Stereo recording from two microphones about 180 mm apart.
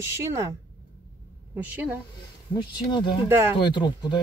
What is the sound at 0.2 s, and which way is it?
Speech, 15° right (ahead or behind).